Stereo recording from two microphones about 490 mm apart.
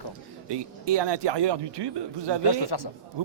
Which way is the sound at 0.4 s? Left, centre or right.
Right.